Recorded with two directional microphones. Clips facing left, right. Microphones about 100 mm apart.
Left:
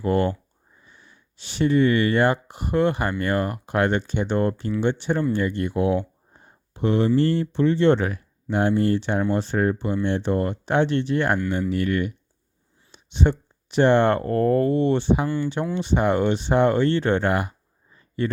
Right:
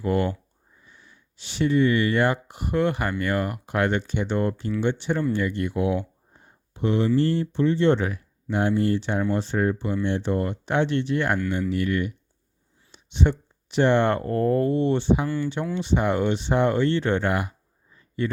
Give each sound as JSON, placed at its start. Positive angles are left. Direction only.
{"t": 0.0, "sound": "speech", "side_deg": 40}
{"t": 2.1, "sound": "speech", "side_deg": 35}
{"t": 6.7, "sound": "speech", "side_deg": 50}
{"t": 7.2, "sound": "speech", "side_deg": 65}
{"t": 12.9, "sound": "speech", "side_deg": 40}